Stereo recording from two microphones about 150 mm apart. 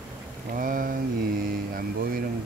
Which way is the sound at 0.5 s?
65° right (ahead or behind).